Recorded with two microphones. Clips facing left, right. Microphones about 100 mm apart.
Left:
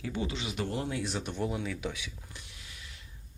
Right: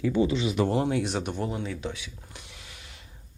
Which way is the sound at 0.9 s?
65° right (ahead or behind).